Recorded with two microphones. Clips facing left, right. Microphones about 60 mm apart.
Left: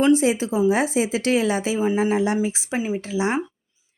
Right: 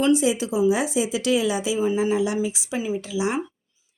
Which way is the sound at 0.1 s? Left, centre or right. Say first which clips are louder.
Left 2 dB; left.